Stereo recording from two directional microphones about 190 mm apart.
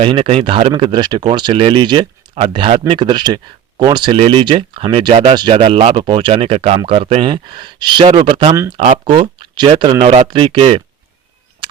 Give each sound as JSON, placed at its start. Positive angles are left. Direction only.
{"t": 0.0, "sound": "speech", "side_deg": -30}